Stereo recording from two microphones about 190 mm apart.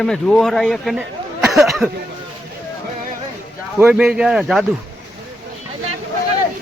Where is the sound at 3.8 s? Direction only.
5° right (ahead or behind).